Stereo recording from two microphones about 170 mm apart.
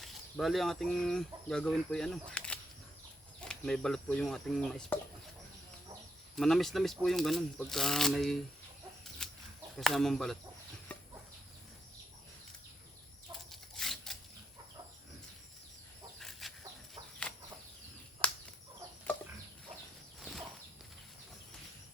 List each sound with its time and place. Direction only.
0.0 s speech: centre (ahead or behind)
6.3 s speech: centre (ahead or behind)
9.2 s chicken: 5° left (ahead or behind)
9.7 s speech: 5° left (ahead or behind)
10.9 s chicken: 10° left (ahead or behind)
13.5 s a sound: centre (ahead or behind)
16.4 s chicken: centre (ahead or behind)
17.2 s a sound: 5° left (ahead or behind)
18.2 s chicken: 5° left (ahead or behind)
20.1 s a sound: centre (ahead or behind)